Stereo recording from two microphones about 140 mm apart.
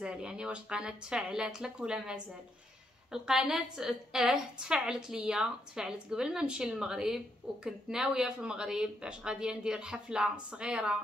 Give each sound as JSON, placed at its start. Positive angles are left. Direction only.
{"t": 0.0, "sound": "a woman's voice", "side_deg": -5}